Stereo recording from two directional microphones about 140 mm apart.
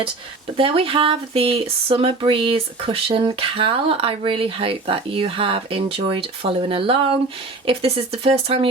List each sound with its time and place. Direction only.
0.5 s speech: 40° right (ahead or behind)